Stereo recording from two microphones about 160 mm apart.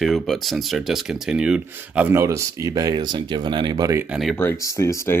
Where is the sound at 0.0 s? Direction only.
Centre (ahead or behind); by 4.0 s 25° right (ahead or behind).